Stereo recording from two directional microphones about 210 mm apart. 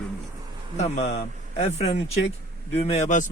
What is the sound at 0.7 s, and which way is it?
Speech, 35° left (ahead or behind).